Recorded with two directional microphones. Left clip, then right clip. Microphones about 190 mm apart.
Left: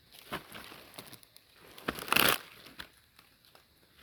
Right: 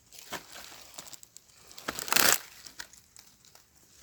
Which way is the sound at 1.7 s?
45° left (ahead or behind).